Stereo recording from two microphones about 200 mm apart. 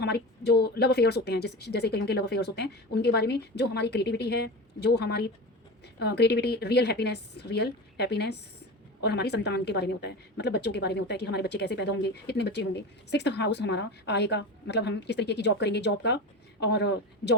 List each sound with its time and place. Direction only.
0.0 s a woman's voice: 55° left (ahead or behind)